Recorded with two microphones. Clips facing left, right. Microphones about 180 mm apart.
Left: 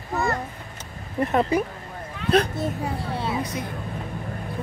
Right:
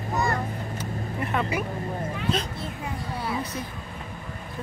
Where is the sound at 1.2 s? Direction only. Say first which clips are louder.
Left 7 dB; 40° left (ahead or behind).